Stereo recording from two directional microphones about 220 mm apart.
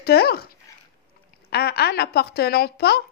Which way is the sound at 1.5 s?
45° left (ahead or behind).